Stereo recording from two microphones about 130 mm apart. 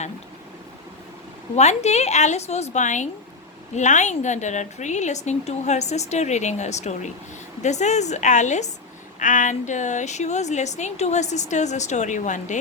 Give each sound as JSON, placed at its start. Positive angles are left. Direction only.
{"t": 1.5, "sound": "a woman's voice", "side_deg": 60}
{"t": 9.1, "sound": "a woman's voice", "side_deg": 80}